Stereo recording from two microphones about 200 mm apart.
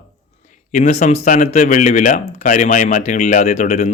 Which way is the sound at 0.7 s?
35° left (ahead or behind).